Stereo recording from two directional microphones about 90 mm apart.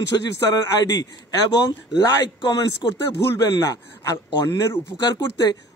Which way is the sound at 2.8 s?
50° left (ahead or behind).